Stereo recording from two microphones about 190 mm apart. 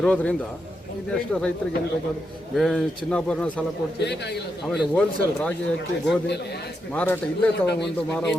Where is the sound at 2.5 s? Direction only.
Centre (ahead or behind).